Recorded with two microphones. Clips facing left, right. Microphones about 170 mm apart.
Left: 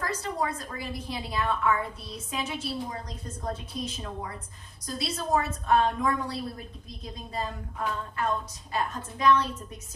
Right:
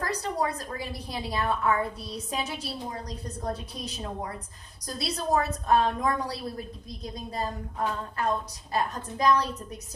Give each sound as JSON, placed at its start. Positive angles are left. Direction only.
{"t": 0.0, "sound": "a woman's voice", "side_deg": -35}